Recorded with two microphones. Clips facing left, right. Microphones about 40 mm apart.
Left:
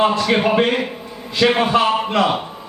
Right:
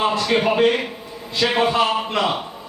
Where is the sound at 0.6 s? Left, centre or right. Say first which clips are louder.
Even; centre.